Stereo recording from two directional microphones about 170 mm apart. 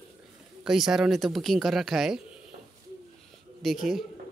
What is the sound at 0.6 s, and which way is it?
Speech, centre (ahead or behind).